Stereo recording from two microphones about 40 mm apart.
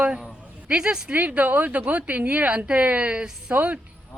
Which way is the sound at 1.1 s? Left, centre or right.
Right.